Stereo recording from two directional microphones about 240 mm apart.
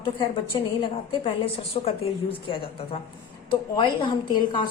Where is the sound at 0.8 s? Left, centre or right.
Left.